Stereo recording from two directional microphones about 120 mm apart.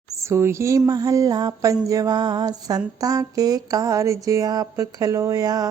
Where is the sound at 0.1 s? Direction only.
25° right (ahead or behind).